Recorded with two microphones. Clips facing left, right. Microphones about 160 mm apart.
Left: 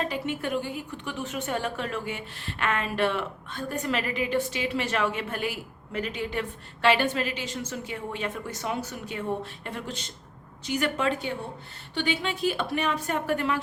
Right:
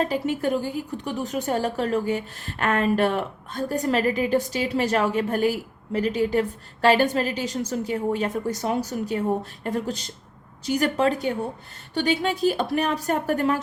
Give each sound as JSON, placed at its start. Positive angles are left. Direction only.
{"t": 0.0, "sound": "a woman's voice", "side_deg": -40}